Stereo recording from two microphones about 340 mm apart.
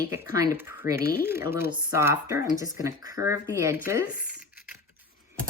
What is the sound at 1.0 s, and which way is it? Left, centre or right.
Speech, left.